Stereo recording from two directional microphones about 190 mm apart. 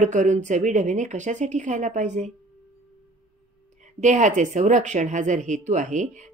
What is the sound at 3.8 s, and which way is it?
Speech, 40° right (ahead or behind).